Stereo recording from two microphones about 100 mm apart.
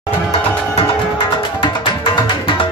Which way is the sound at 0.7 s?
60° left (ahead or behind).